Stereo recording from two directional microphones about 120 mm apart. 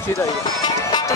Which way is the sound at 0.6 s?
35° left (ahead or behind).